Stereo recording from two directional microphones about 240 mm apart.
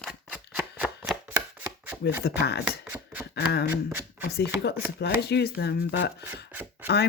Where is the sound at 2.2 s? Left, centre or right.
Left.